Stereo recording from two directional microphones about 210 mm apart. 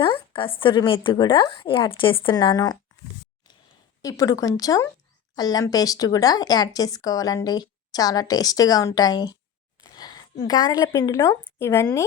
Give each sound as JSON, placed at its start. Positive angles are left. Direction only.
{"t": 0.0, "sound": "speech", "side_deg": 25}
{"t": 4.0, "sound": "speech", "side_deg": 15}
{"t": 9.9, "sound": "a sound", "side_deg": 20}
{"t": 10.4, "sound": "speech", "side_deg": 15}